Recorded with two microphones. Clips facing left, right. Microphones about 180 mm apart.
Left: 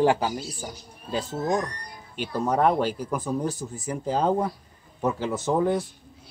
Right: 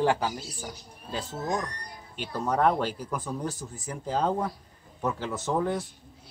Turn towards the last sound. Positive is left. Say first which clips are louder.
# left 5 dB
turn(degrees=15)  # may be behind; listen again after turning